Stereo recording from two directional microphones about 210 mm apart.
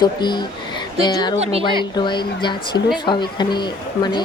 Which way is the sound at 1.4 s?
30° right (ahead or behind).